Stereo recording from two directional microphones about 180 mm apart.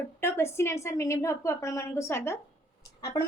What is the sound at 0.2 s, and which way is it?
A woman's voice, 15° left (ahead or behind).